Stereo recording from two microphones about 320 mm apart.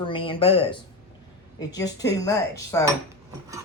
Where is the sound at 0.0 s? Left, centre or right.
Centre.